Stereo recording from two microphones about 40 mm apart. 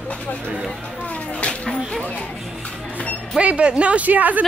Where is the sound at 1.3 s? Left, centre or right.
Left.